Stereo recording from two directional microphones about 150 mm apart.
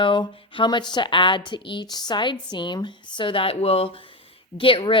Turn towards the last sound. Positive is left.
turn(degrees=35)  # may be behind; listen again after turning